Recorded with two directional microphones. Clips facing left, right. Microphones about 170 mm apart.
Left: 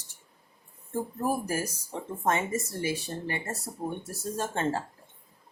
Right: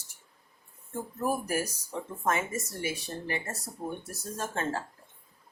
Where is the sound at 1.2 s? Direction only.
25° left (ahead or behind).